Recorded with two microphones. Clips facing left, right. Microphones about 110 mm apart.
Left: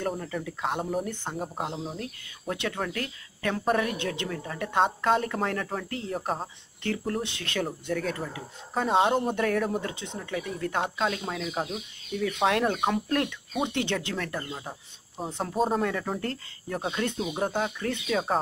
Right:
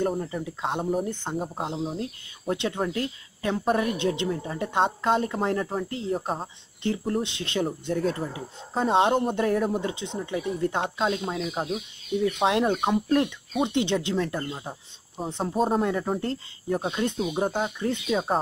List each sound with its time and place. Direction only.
0.2 s speech: 20° right (ahead or behind)
14.5 s speech: 10° right (ahead or behind)
15.8 s speech: 20° right (ahead or behind)
16.7 s speech: 10° right (ahead or behind)
17.5 s speech: 15° right (ahead or behind)